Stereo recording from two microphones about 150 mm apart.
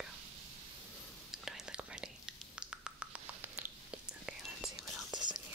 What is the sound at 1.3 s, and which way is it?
Whispering, 5° right (ahead or behind).